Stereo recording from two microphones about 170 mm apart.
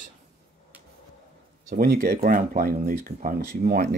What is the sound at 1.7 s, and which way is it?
Speech, 65° right (ahead or behind).